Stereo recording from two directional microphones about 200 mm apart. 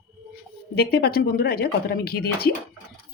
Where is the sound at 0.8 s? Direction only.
50° left (ahead or behind).